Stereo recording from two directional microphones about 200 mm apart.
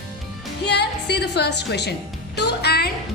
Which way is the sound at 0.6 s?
55° left (ahead or behind).